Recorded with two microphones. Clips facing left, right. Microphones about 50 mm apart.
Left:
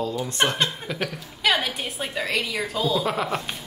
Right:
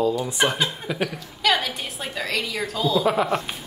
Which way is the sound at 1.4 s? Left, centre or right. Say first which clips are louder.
Right 1 dB; centre.